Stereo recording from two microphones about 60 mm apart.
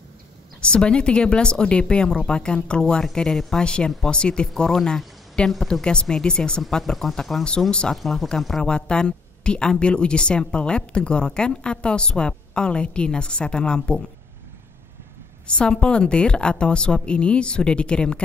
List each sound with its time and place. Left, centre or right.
0.6 s speech: centre
6.8 s speech: centre
15.4 s speech: centre